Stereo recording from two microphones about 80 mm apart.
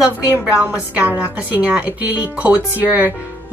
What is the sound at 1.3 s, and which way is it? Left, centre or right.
Speech, centre.